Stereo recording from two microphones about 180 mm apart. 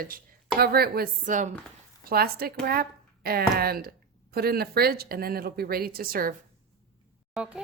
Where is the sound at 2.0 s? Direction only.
55° right (ahead or behind).